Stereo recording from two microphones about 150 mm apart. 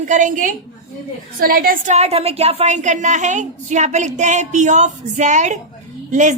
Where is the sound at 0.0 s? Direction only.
55° right (ahead or behind).